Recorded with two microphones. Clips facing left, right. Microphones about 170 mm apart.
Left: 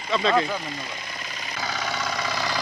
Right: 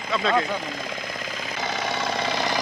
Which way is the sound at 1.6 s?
25° right (ahead or behind).